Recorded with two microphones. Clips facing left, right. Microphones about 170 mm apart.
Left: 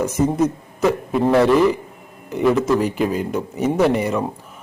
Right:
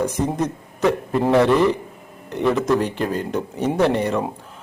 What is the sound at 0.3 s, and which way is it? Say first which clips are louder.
A man's voice: left 5 dB; 5° left (ahead or behind).